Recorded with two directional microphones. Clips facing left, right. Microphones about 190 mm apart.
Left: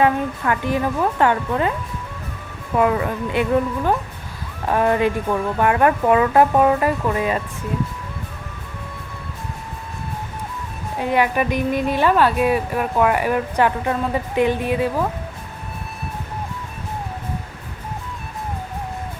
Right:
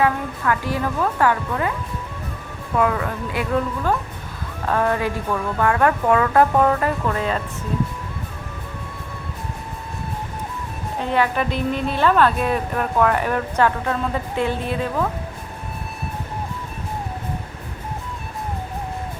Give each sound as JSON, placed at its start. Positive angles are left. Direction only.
{"t": 0.0, "sound": "a woman's voice", "side_deg": 20}
{"t": 2.7, "sound": "a woman's voice", "side_deg": 20}
{"t": 4.7, "sound": "a woman's voice", "side_deg": 15}
{"t": 11.0, "sound": "a woman's voice", "side_deg": 15}